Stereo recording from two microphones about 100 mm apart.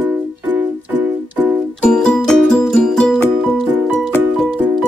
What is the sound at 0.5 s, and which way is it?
Music, 15° right (ahead or behind).